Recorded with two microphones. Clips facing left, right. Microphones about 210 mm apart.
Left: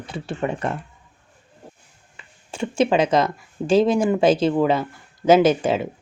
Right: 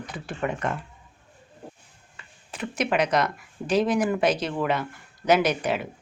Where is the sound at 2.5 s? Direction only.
30° left (ahead or behind).